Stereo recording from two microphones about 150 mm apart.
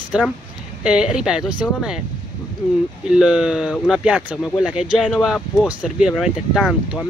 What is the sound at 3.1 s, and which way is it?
Speech, 5° right (ahead or behind).